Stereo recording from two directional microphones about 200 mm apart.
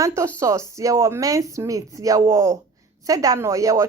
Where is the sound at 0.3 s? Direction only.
15° right (ahead or behind).